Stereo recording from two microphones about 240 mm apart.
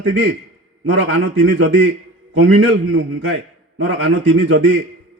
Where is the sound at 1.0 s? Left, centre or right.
Right.